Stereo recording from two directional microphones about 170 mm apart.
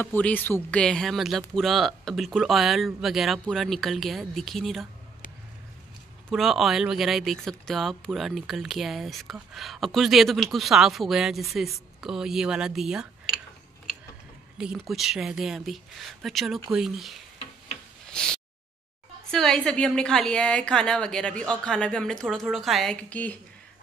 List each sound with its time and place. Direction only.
0.0 s speech: 10° left (ahead or behind)
6.3 s speech: centre (ahead or behind)
14.6 s speech: 5° right (ahead or behind)
18.0 s a sound: 5° left (ahead or behind)
19.3 s speech: 5° left (ahead or behind)